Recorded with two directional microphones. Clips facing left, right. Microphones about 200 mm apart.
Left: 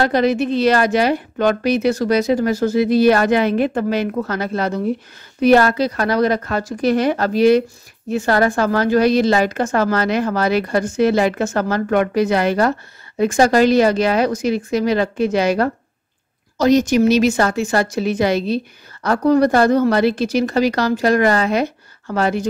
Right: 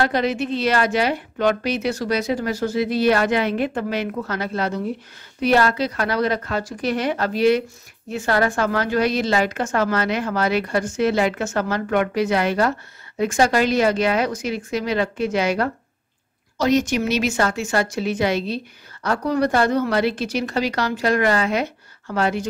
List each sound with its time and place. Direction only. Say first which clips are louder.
0.0 s a woman's voice: left 5 dB; 40° left (ahead or behind)